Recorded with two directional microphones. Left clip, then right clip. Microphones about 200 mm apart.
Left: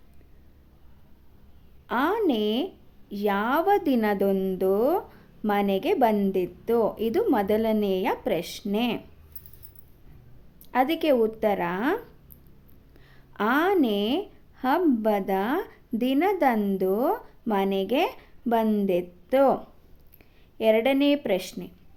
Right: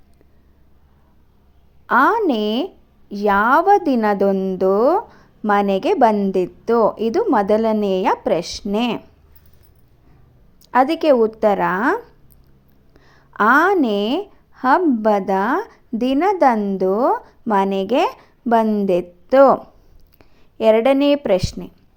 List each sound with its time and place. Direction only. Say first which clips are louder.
1.9 s a woman's voice: right 10 dB; 20° right (ahead or behind)
10.6 s a woman's voice: right 8 dB; 20° right (ahead or behind)